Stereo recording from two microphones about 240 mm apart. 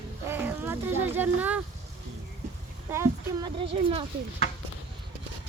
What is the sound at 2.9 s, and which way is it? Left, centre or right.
Speech, centre.